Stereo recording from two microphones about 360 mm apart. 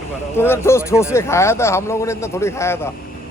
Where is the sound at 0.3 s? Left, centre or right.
Centre.